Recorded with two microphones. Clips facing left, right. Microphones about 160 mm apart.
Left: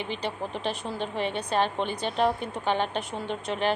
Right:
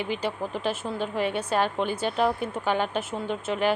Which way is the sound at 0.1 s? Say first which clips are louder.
Right 3 dB; 5° right (ahead or behind).